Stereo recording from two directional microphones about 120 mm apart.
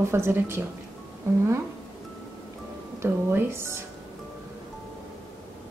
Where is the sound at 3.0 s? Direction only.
20° right (ahead or behind).